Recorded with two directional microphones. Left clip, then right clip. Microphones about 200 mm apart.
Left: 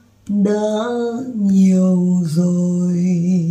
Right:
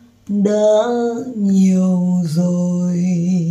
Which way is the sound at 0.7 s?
10° right (ahead or behind).